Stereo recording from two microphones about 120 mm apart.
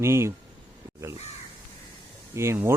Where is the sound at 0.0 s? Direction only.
20° right (ahead or behind).